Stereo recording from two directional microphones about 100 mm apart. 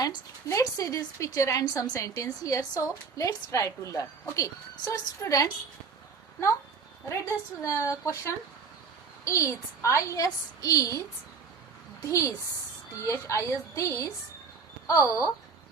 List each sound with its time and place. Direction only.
0.4 s a woman's voice: 30° left (ahead or behind)
7.6 s a woman's voice: 30° left (ahead or behind)
12.0 s a woman's voice: 30° left (ahead or behind)